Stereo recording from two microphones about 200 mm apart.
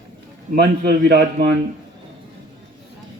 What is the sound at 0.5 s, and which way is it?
A man's voice, 55° right (ahead or behind).